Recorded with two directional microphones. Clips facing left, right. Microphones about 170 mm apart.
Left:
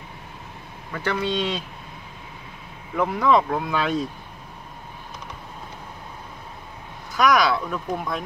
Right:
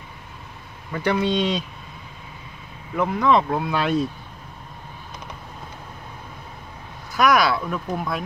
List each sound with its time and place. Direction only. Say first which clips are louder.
1.0 s speech: right 3 dB; 15° right (ahead or behind)
3.0 s speech: even; 5° left (ahead or behind)
3.5 s speech: right 2 dB; 10° right (ahead or behind)
7.2 s speech: right 1 dB; 5° right (ahead or behind)